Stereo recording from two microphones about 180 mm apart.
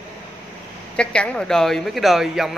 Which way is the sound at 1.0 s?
5° left (ahead or behind).